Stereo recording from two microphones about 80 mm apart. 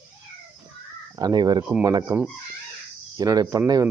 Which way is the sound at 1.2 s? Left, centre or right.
Right.